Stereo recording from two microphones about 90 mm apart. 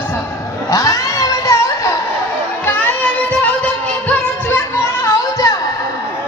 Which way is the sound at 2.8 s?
15° left (ahead or behind).